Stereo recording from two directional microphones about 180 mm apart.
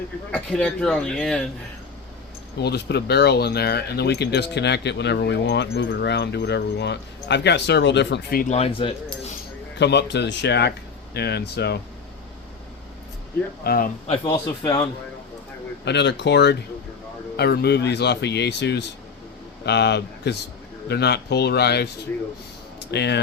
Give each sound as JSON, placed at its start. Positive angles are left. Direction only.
{"t": 0.3, "sound": "speech", "side_deg": 5}
{"t": 2.6, "sound": "speech", "side_deg": 65}
{"t": 8.4, "sound": "speech", "side_deg": 35}
{"t": 9.7, "sound": "speech", "side_deg": 70}
{"t": 13.7, "sound": "a man's voice", "side_deg": 55}
{"t": 15.8, "sound": "a man's voice", "side_deg": 70}
{"t": 22.9, "sound": "speech", "side_deg": 70}